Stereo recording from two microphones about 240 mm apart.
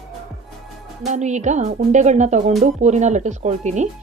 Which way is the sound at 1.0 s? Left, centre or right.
Right.